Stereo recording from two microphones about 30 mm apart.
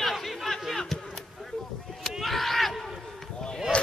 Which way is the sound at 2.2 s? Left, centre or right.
Centre.